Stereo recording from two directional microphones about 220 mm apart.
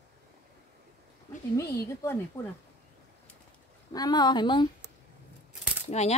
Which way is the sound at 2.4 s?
15° left (ahead or behind).